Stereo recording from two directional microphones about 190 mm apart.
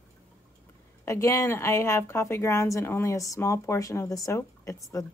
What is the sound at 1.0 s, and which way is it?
Speech, 15° left (ahead or behind).